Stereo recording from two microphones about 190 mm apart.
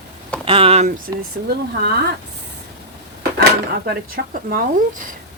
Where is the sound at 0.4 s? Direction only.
30° right (ahead or behind); by 1.9 s 50° right (ahead or behind).